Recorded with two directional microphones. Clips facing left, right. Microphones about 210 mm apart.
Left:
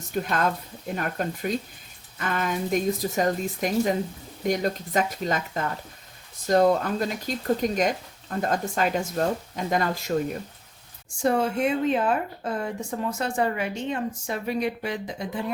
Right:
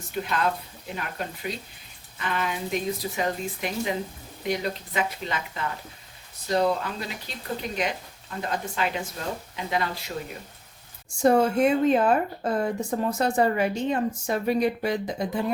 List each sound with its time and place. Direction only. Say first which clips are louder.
0.1 s speech: left 2 dB; 45° left (ahead or behind)
11.2 s speech: right 3 dB; 40° right (ahead or behind)